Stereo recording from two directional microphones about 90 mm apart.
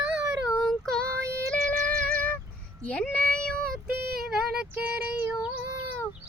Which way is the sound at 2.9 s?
10° left (ahead or behind).